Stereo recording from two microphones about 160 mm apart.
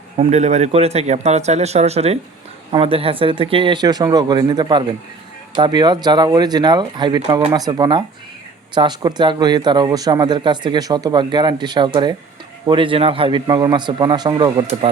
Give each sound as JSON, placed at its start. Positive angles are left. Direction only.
{"t": 0.2, "sound": "speech", "side_deg": -45}